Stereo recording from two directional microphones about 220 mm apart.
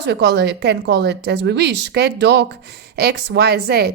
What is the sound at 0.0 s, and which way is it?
A woman's voice, 50° right (ahead or behind).